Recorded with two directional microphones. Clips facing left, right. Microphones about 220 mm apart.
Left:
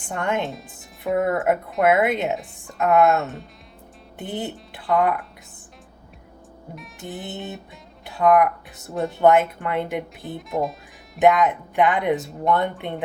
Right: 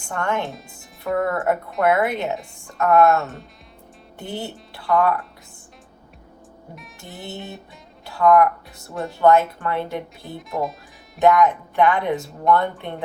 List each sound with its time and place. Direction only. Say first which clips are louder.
0.1 s speech: even; 20° left (ahead or behind)
0.4 s speech: left 2 dB; centre (ahead or behind)
1.2 s speech: left 1 dB; 20° left (ahead or behind)
6.7 s speech: left 8 dB; centre (ahead or behind)
7.2 s speech: right 1 dB; 20° left (ahead or behind)
8.0 s music: right 1 dB; 20° left (ahead or behind)
9.2 s speech: right 1 dB; 20° left (ahead or behind)
10.3 s speech: left 1 dB; centre (ahead or behind)
11.2 s speech: right 1 dB; 20° left (ahead or behind)